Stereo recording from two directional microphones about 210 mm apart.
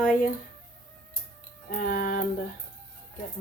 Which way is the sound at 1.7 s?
40° left (ahead or behind).